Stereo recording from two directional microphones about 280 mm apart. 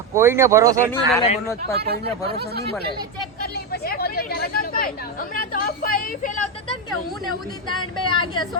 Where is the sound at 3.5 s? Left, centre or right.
Left.